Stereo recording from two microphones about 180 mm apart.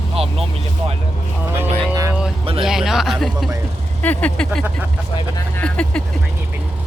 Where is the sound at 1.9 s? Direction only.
20° right (ahead or behind).